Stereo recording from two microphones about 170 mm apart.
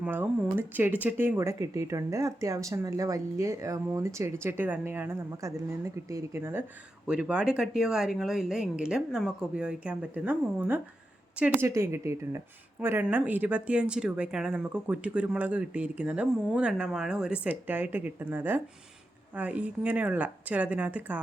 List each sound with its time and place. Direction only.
0.0 s speech: 10° right (ahead or behind)